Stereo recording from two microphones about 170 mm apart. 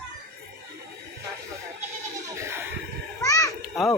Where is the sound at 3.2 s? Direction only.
20° left (ahead or behind).